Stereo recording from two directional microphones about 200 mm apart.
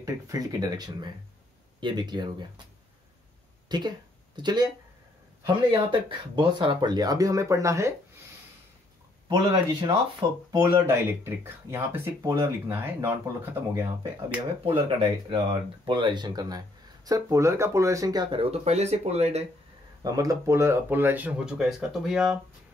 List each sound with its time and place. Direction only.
0.0 s speech: 15° right (ahead or behind)
3.6 s speech: 20° right (ahead or behind)
5.7 s speech: 25° right (ahead or behind)
9.3 s speech: 25° right (ahead or behind)
10.5 s speech: 10° right (ahead or behind)
14.6 s speech: 25° right (ahead or behind)
20.0 s speech: 20° right (ahead or behind); by 22.4 s 5° right (ahead or behind)